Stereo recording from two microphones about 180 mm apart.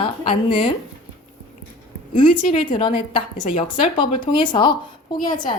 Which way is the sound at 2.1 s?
30° left (ahead or behind).